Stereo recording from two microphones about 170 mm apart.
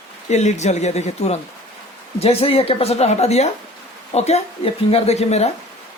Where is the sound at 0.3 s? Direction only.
40° left (ahead or behind).